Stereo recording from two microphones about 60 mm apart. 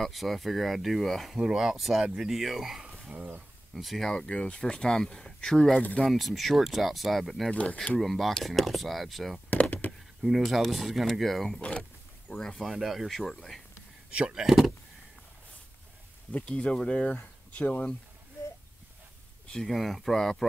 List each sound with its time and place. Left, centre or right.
0.0 s speech: centre
3.2 s speech: right
3.7 s speech: centre
4.1 s speech: centre
7.5 s speech: centre
8.0 s speech: centre
9.5 s a sound: left
10.2 s speech: centre
12.7 s speech: centre
14.1 s speech: right
14.4 s speech: centre
16.3 s speech: left
19.5 s speech: centre